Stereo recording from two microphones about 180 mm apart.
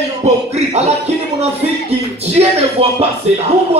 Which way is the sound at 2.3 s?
35° right (ahead or behind).